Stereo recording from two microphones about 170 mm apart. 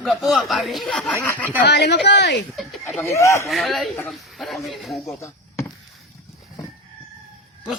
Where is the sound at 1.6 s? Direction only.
80° left.